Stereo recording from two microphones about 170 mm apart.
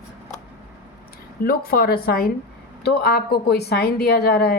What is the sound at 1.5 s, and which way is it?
A woman's voice, 65° left (ahead or behind).